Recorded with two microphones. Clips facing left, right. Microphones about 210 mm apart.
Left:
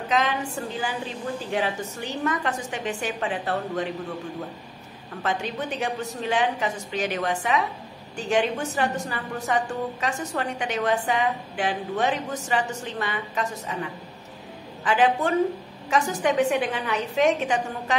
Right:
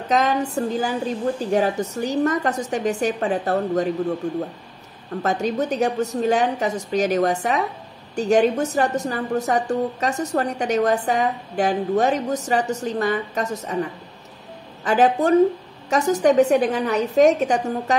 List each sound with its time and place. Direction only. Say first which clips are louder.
0.1 s a woman's voice: right 5 dB; 40° right (ahead or behind)
5.2 s a woman's voice: right 6 dB; 40° right (ahead or behind)